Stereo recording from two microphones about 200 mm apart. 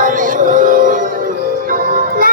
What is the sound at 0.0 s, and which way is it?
Music, 40° right (ahead or behind).